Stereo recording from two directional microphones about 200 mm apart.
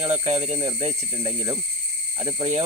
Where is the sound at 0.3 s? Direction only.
30° right (ahead or behind).